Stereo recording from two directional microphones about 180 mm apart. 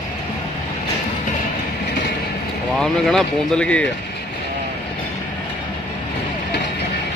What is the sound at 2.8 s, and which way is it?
Speech, 5° left (ahead or behind).